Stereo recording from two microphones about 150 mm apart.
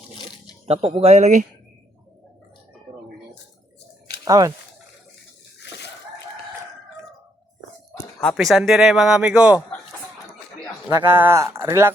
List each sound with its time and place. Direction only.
0.6 s speech: 40° right (ahead or behind)
4.3 s speech: 25° right (ahead or behind)
8.2 s speech: centre (ahead or behind)
10.8 s speech: 15° right (ahead or behind)